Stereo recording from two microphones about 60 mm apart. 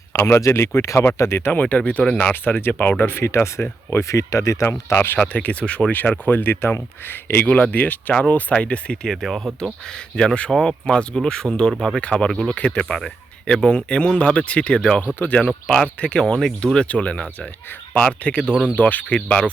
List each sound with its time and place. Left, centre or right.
0.1 s speech: left
1.7 s speech: left
4.1 s speech: left
4.9 s speech: left
5.2 s speech: left
9.2 s speech: centre
10.2 s speech: centre
15.6 s speech: centre